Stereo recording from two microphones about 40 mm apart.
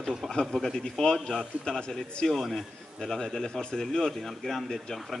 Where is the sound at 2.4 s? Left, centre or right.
Centre.